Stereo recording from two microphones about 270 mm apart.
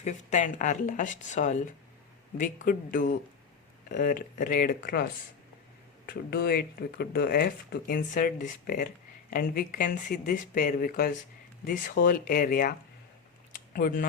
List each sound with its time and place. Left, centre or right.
0.0 s speech: left
6.1 s speech: left
13.7 s speech: left